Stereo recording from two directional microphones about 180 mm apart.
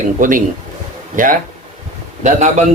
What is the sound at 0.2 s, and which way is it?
A man's voice, 50° right (ahead or behind).